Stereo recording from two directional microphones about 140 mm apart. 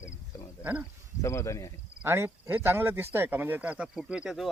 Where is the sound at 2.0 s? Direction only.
20° right (ahead or behind).